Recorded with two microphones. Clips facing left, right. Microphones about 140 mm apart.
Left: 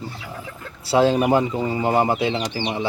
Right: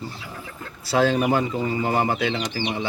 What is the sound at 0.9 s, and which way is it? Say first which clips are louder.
Speech: left 3 dB; 30° left (ahead or behind).